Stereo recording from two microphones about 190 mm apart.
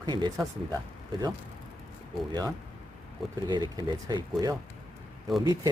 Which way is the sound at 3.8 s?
20° right (ahead or behind).